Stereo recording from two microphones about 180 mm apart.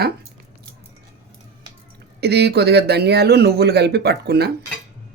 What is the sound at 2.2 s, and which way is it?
Speech, 65° right (ahead or behind).